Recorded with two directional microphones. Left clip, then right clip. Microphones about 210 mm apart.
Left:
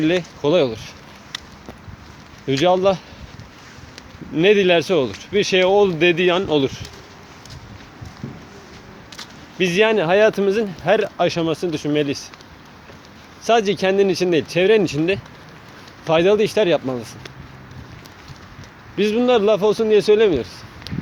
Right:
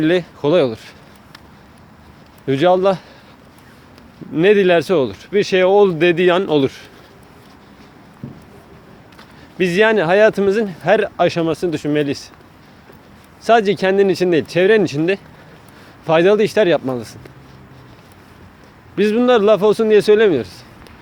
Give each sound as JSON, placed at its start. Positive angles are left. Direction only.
{"t": 0.0, "sound": "a man's voice", "side_deg": -30}
{"t": 2.5, "sound": "speech", "side_deg": -30}
{"t": 4.4, "sound": "speech", "side_deg": -25}
{"t": 9.6, "sound": "speech", "side_deg": -25}
{"t": 13.4, "sound": "speech", "side_deg": -30}
{"t": 18.9, "sound": "a man's voice", "side_deg": -30}
{"t": 20.9, "sound": "a sound", "side_deg": 0}